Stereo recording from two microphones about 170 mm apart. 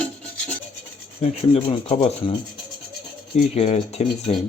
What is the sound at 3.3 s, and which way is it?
Rub, 40° left (ahead or behind).